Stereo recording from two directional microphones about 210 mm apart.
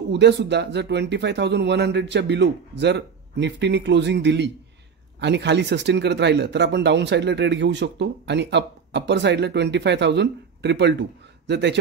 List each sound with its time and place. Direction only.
0.1 s speech: 55° right (ahead or behind)